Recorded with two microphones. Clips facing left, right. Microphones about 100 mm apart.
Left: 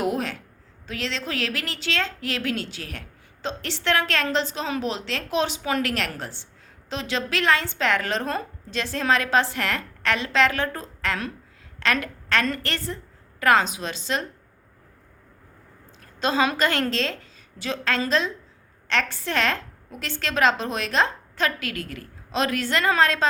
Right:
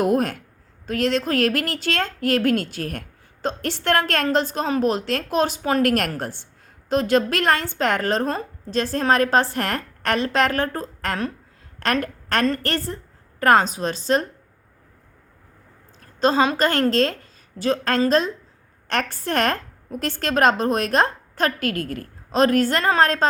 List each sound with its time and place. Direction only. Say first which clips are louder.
0.0 s a sound: right 6 dB; 50° right (ahead or behind)
0.9 s a woman's voice: right 9 dB; 50° right (ahead or behind)
16.0 s a woman's voice: right 4 dB; 35° right (ahead or behind)